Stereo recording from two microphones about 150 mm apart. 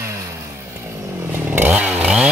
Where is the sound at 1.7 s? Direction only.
10° right (ahead or behind).